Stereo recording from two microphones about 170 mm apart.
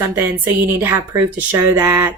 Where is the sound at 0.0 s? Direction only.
10° right (ahead or behind).